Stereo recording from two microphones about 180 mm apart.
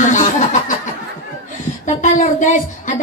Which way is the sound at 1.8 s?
45° left (ahead or behind).